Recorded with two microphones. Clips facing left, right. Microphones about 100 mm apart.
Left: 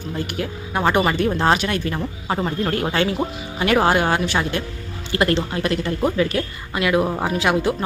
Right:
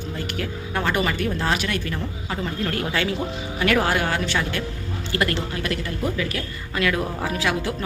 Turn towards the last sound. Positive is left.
turn(degrees=20)  # may be behind; listen again after turning